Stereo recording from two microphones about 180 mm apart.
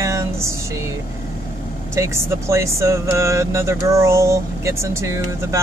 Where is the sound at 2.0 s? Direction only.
15° right (ahead or behind).